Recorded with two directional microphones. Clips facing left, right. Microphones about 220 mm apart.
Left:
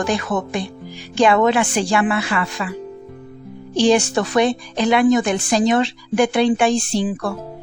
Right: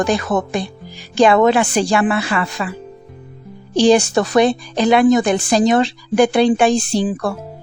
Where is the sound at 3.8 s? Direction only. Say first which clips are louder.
Right 3 dB; 35° right (ahead or behind).